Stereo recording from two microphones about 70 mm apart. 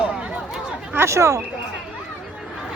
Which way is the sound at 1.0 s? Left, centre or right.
Right.